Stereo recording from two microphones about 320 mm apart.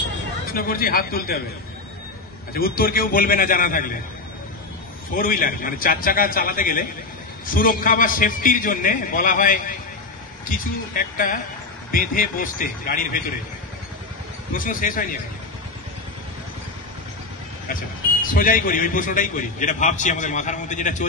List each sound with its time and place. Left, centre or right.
0.5 s a man's voice: left
2.5 s a man's voice: left
5.1 s a man's voice: left
14.5 s a man's voice: left
18.2 s a man's voice: left